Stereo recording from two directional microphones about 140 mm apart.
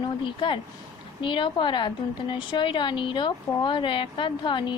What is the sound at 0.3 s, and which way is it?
A woman's voice, 35° left (ahead or behind).